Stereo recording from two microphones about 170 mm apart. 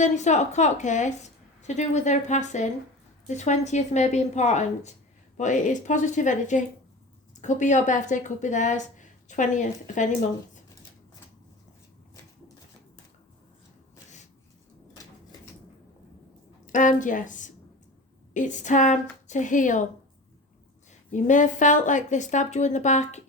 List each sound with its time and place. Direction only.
0.0 s a woman's voice: 45° left (ahead or behind)
16.6 s a woman's voice: 50° left (ahead or behind)
21.1 s a woman's voice: 45° left (ahead or behind)